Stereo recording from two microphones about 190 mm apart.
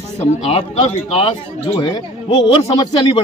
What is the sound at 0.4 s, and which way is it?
Speech, 30° left (ahead or behind).